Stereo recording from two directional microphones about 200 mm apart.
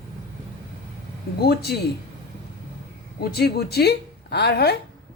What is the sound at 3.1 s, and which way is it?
Speech, 50° left (ahead or behind).